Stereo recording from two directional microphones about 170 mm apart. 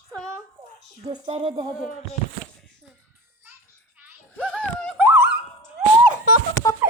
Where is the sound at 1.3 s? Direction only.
35° right (ahead or behind).